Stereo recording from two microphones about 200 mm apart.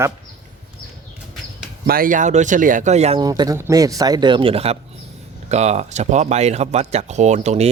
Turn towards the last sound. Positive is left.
turn(degrees=-35)  # may be behind; listen again after turning